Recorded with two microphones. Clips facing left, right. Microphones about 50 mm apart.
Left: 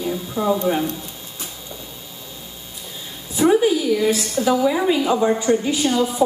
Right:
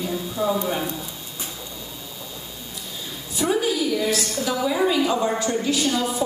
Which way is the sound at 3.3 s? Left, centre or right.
Left.